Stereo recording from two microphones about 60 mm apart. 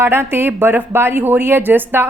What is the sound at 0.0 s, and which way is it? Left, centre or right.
A woman's voice, right.